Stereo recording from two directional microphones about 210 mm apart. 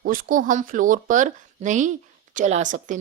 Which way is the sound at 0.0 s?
40° right (ahead or behind).